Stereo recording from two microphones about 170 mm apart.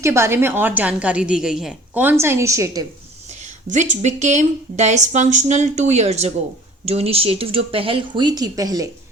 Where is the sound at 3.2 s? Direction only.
45° right (ahead or behind).